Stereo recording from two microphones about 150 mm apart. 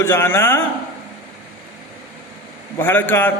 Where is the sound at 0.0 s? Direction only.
15° left (ahead or behind).